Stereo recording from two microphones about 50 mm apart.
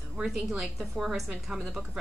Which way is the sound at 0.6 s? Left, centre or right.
Centre.